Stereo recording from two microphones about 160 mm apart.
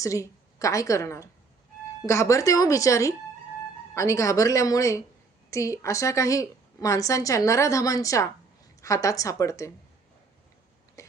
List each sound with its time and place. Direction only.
0.0 s a woman's voice: 20° left (ahead or behind)